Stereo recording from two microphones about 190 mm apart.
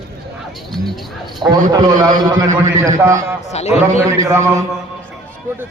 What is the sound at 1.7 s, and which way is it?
Speech, 20° right (ahead or behind).